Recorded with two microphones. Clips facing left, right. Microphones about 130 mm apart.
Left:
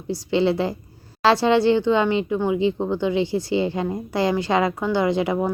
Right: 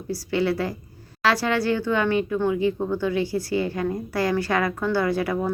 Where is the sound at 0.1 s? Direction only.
25° left (ahead or behind).